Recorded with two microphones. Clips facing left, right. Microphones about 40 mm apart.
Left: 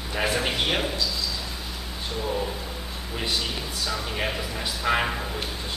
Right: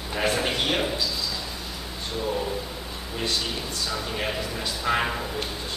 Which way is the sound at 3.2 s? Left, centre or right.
Centre.